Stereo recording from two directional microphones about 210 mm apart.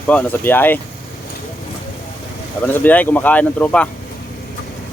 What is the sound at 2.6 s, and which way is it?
Speech, 10° left (ahead or behind).